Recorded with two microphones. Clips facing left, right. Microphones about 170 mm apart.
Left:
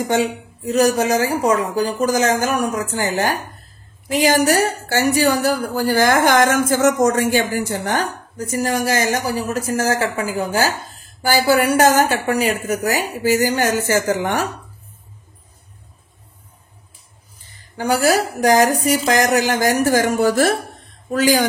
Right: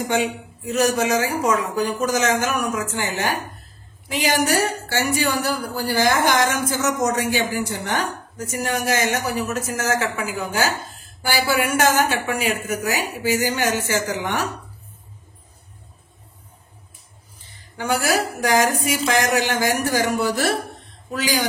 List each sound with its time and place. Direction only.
0.1 s a woman's voice: 40° left (ahead or behind)
17.7 s a woman's voice: 35° left (ahead or behind)